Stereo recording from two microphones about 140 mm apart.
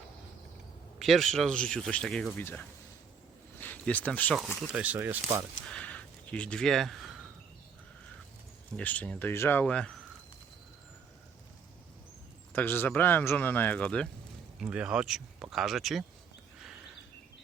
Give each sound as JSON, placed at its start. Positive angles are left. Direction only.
{"t": 0.9, "sound": "speech", "side_deg": 0}
{"t": 4.7, "sound": "speech", "side_deg": -10}
{"t": 5.6, "sound": "speech", "side_deg": 10}
{"t": 8.7, "sound": "speech", "side_deg": 10}
{"t": 12.5, "sound": "speech", "side_deg": 15}
{"t": 14.6, "sound": "speech", "side_deg": -5}
{"t": 16.6, "sound": "a sound", "side_deg": -5}